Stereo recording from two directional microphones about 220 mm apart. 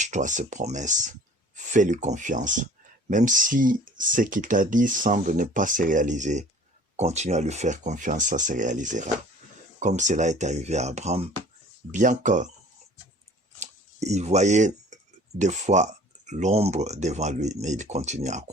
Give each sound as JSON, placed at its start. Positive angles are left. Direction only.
{"t": 0.0, "sound": "speech", "side_deg": -35}
{"t": 13.6, "sound": "a sound", "side_deg": -30}
{"t": 15.4, "sound": "speech", "side_deg": -30}